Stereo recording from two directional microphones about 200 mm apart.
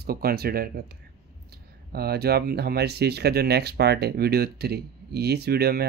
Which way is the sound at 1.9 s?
50° right (ahead or behind).